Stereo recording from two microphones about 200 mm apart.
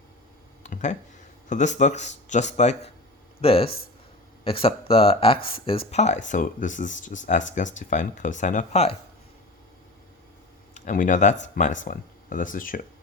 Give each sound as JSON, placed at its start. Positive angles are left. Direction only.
{"t": 0.6, "sound": "a sound", "side_deg": 35}
{"t": 1.5, "sound": "speech", "side_deg": 35}
{"t": 10.8, "sound": "speech", "side_deg": 40}